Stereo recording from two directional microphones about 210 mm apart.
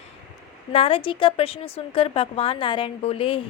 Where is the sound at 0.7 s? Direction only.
25° left (ahead or behind).